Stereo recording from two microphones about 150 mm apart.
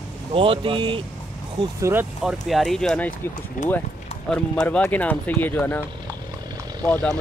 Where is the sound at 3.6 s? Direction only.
60° left (ahead or behind).